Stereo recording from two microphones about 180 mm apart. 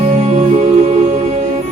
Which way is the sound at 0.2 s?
35° right (ahead or behind).